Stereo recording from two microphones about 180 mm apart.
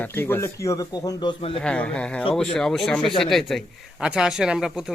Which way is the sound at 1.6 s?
5° left (ahead or behind).